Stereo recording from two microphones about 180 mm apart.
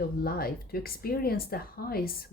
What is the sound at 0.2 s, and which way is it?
Speech, 55° left (ahead or behind).